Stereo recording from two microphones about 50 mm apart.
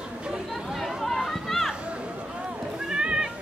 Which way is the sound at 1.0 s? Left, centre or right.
Centre.